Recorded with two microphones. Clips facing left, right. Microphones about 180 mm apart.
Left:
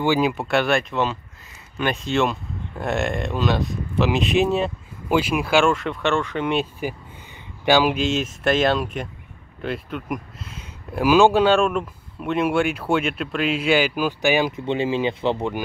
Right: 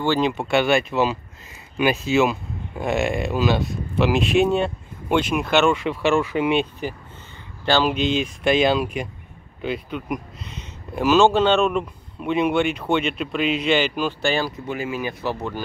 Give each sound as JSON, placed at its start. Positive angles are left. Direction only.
{"t": 0.0, "sound": "speech", "side_deg": 10}
{"t": 14.5, "sound": "speech", "side_deg": 25}